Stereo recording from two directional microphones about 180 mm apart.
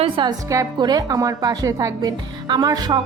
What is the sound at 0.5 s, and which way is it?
Speech, 20° right (ahead or behind).